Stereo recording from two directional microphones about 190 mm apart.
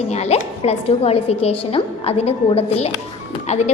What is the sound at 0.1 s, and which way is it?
A woman's voice, 35° left (ahead or behind).